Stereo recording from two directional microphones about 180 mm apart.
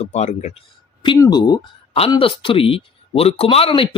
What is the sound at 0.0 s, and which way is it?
Speech, 40° left (ahead or behind).